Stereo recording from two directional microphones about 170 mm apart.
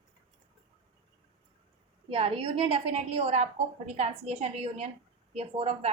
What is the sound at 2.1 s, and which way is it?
A woman's voice, 35° right (ahead or behind).